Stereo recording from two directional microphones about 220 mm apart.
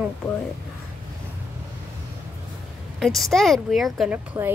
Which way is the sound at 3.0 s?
Centre (ahead or behind).